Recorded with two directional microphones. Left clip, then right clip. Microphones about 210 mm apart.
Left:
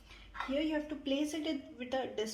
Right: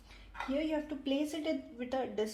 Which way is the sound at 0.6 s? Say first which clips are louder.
Even; 25° right (ahead or behind).